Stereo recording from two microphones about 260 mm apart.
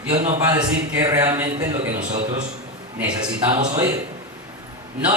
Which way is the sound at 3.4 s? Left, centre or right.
Centre.